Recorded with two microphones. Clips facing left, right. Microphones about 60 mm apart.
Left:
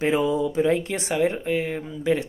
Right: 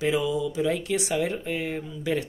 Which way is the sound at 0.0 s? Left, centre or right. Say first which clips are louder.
Left 3 dB; left.